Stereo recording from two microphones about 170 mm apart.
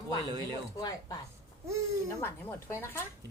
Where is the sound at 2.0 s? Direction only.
15° left (ahead or behind).